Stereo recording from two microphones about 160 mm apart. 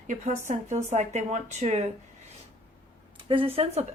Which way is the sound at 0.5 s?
45° right (ahead or behind).